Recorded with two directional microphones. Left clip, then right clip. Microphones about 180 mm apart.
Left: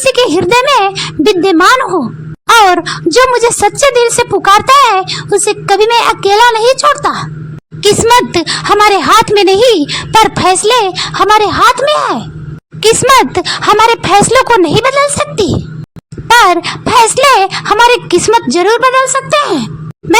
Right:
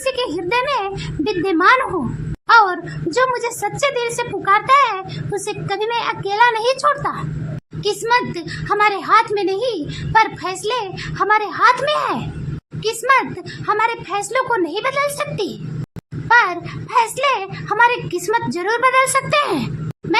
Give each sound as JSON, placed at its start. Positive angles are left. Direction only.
{"t": 0.0, "sound": "speech", "side_deg": 45}
{"t": 11.9, "sound": "speech", "side_deg": 30}
{"t": 12.8, "sound": "speech", "side_deg": 50}
{"t": 16.3, "sound": "speech", "side_deg": 55}